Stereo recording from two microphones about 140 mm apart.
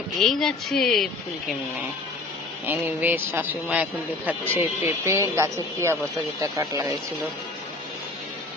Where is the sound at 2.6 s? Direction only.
15° right (ahead or behind).